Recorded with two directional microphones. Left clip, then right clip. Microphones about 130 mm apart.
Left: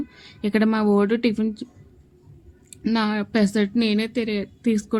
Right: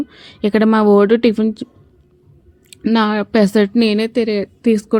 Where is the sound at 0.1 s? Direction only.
55° right (ahead or behind).